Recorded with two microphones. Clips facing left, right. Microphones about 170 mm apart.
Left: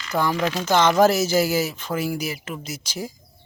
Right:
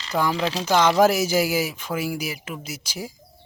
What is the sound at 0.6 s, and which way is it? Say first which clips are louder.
A man's voice: left 1 dB; 10° right (ahead or behind).